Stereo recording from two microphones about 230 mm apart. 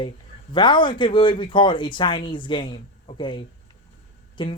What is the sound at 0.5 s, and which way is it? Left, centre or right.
Speech, centre.